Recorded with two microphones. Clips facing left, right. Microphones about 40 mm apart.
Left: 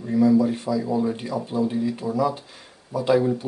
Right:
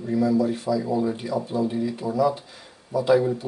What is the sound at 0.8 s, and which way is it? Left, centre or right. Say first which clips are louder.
Speech: left 1 dB; centre.